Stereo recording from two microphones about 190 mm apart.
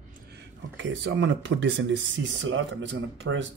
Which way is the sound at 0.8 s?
70° right (ahead or behind).